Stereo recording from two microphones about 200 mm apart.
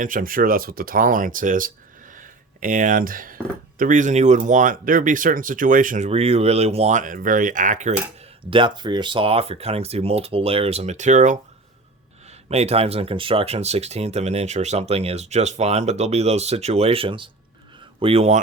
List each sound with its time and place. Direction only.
0.0 s speech: 45° right (ahead or behind)
8.4 s speech: 25° right (ahead or behind)
12.5 s speech: 30° right (ahead or behind)